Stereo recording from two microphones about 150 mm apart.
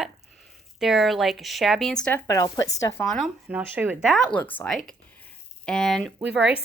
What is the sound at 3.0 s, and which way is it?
Speech, centre (ahead or behind).